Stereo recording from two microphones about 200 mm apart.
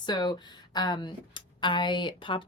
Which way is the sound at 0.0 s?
20° left (ahead or behind).